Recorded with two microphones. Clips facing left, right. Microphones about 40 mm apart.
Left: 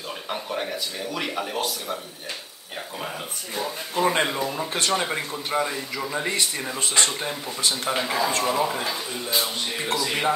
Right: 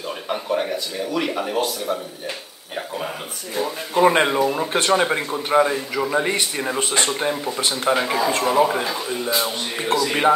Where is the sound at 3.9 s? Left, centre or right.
Right.